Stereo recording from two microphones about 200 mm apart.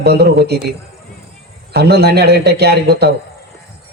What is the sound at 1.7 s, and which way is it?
A man's voice, 55° right (ahead or behind).